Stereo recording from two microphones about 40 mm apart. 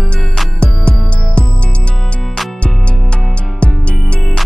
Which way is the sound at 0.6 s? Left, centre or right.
Left.